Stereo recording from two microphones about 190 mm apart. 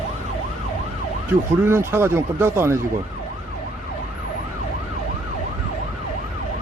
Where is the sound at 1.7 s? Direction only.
15° right (ahead or behind).